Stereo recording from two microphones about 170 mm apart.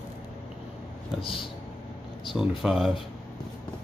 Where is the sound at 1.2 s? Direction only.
30° left (ahead or behind).